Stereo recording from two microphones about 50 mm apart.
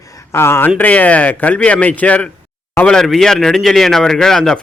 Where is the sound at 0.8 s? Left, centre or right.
Left.